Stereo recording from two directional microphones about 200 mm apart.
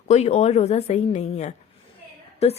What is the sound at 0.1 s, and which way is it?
A woman's voice, 35° left (ahead or behind).